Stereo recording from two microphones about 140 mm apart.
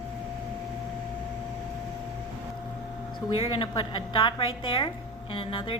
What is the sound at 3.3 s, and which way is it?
A woman's voice, 35° left (ahead or behind).